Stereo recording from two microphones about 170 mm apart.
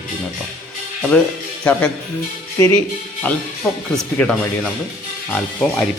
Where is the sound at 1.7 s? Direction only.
10° left (ahead or behind).